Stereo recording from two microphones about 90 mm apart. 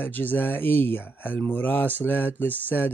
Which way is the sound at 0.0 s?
20° left (ahead or behind).